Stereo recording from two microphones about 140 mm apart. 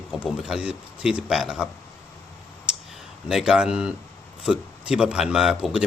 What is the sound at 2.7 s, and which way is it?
Clicking, 5° right (ahead or behind).